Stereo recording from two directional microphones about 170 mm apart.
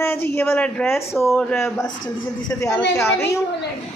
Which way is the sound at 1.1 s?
Centre (ahead or behind).